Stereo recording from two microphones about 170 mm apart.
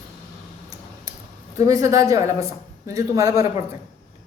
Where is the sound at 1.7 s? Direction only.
20° right (ahead or behind).